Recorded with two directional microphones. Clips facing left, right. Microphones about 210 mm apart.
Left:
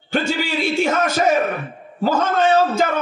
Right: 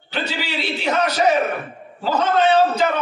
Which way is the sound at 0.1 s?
50° left (ahead or behind).